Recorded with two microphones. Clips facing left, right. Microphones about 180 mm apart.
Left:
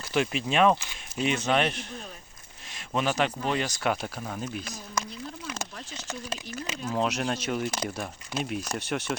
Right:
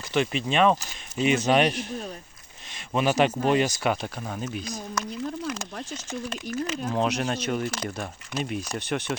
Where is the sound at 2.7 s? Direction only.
5° right (ahead or behind).